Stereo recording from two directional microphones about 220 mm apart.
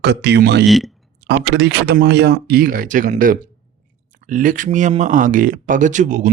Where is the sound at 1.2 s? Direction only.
50° right (ahead or behind); by 6.3 s 35° right (ahead or behind).